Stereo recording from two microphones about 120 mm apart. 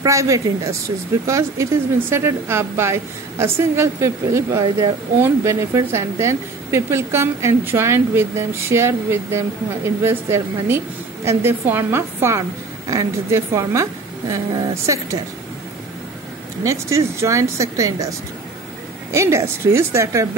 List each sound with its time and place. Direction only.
0.0 s speech: 25° right (ahead or behind)
16.6 s speech: 25° right (ahead or behind)
19.1 s speech: 25° right (ahead or behind)